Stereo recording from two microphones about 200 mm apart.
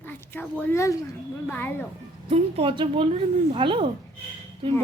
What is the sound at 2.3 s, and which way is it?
Speech, 25° right (ahead or behind).